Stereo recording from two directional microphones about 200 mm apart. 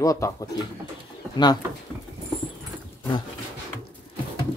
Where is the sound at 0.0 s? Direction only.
15° left (ahead or behind).